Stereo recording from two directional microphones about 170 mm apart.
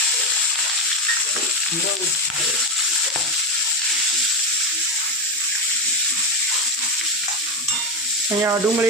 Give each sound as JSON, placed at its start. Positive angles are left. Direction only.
{"t": 8.4, "sound": "speech", "side_deg": -15}